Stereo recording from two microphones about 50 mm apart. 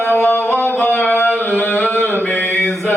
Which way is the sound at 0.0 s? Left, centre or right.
Left.